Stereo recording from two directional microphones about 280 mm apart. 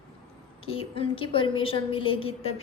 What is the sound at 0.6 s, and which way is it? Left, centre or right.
A woman's voice, centre.